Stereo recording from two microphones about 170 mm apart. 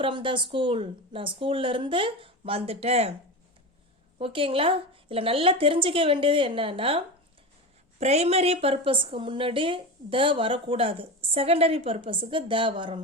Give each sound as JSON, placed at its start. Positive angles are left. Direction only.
{"t": 0.0, "sound": "a woman's voice", "side_deg": -30}
{"t": 4.2, "sound": "a woman's voice", "side_deg": -30}